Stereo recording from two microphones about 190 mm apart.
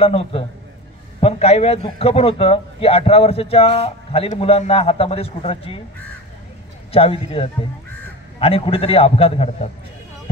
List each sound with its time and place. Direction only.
0.0 s a man's voice: 30° left (ahead or behind)
6.9 s a man's voice: 30° left (ahead or behind)